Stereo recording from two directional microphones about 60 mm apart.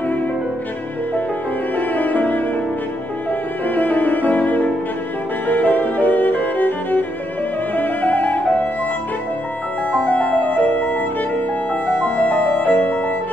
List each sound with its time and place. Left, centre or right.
1.8 s music: left
3.6 s music: left
5.5 s violin: left
7.7 s music: left
10.0 s music: left